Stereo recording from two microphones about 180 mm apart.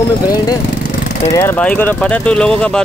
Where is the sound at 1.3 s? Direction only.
10° left (ahead or behind).